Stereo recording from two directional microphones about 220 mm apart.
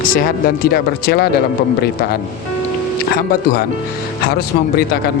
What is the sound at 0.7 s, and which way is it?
Speech, 45° left (ahead or behind).